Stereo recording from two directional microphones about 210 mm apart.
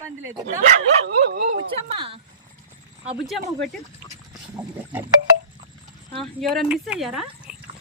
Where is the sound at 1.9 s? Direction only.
25° right (ahead or behind).